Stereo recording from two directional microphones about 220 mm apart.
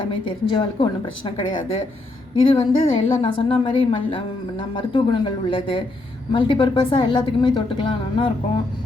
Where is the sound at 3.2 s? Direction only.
25° left (ahead or behind).